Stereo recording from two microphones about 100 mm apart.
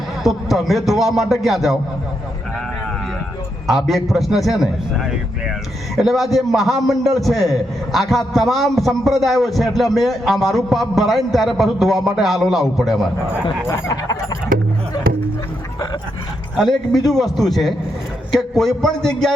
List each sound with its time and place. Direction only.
0.2 s a man's voice: centre (ahead or behind)
3.7 s a man's voice: centre (ahead or behind)
13.7 s speech: 35° left (ahead or behind)
16.6 s a man's voice: centre (ahead or behind)